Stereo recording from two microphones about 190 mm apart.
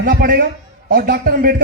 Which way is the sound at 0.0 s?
50° right (ahead or behind).